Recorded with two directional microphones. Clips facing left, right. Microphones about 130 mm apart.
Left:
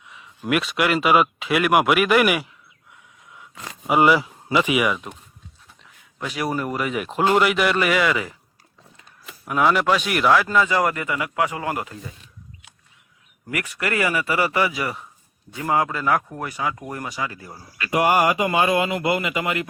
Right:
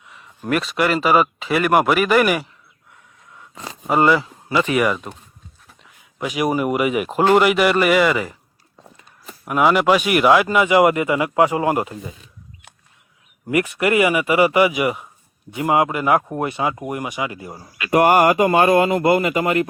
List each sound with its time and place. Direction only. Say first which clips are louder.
0.0 s speech: right 1 dB; centre (ahead or behind)
3.8 s speech: right 1 dB; 10° left (ahead or behind)
5.8 s speech: right 5 dB; 10° right (ahead or behind)
9.5 s speech: right 4 dB; 5° right (ahead or behind); by 12.1 s 20° right (ahead or behind)
13.5 s speech: right 8 dB; 20° right (ahead or behind)
17.9 s speech: right 5 dB; 50° right (ahead or behind)